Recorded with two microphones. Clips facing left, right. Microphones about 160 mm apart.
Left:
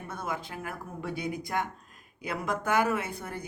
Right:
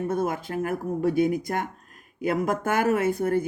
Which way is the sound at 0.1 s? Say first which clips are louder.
Right 9 dB; 45° right (ahead or behind).